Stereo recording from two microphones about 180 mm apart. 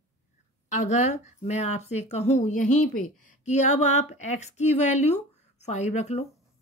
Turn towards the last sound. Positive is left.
turn(degrees=40)  # may be behind; listen again after turning